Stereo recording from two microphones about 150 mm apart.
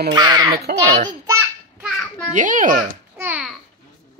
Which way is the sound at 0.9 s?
50° right (ahead or behind).